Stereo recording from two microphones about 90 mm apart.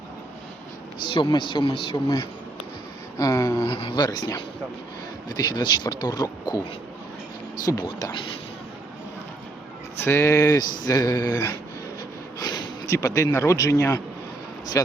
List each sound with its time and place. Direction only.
1.0 s speech: 60° left (ahead or behind)
3.2 s speech: 35° left (ahead or behind)
3.7 s speech: 70° left (ahead or behind)
3.9 s speech: 50° left (ahead or behind)
5.3 s speech: 50° left (ahead or behind)
7.6 s speech: 40° left (ahead or behind)
10.0 s speech: 30° left (ahead or behind)
10.6 s speech: 50° left (ahead or behind)
12.4 s a sound: 50° left (ahead or behind)
12.8 s speech: 35° left (ahead or behind)